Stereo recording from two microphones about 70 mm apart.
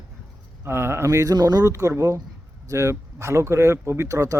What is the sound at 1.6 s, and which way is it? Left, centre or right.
Speech, right.